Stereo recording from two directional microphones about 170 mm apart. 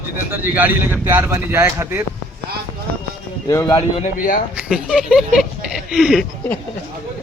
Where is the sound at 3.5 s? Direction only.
20° left (ahead or behind).